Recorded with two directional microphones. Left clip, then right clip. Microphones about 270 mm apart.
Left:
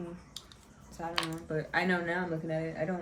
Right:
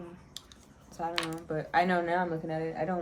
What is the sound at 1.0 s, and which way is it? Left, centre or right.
Speech, centre.